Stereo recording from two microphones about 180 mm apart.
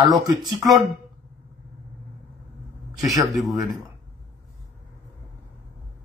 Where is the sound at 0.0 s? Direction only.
20° right (ahead or behind).